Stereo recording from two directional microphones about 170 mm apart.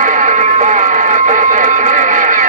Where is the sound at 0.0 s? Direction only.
50° right (ahead or behind).